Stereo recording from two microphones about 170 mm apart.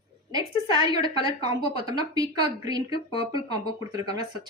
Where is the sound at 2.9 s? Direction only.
30° left (ahead or behind).